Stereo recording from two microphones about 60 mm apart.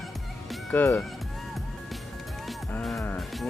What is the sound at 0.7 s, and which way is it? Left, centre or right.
Speech, left.